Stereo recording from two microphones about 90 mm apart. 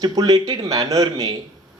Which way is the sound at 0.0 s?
45° right (ahead or behind).